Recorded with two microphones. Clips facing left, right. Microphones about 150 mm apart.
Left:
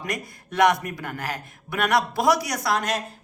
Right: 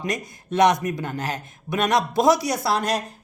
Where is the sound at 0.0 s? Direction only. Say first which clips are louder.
Right 3 dB; 20° right (ahead or behind).